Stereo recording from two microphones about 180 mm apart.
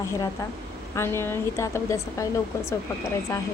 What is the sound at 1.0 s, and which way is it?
Speech, 15° left (ahead or behind).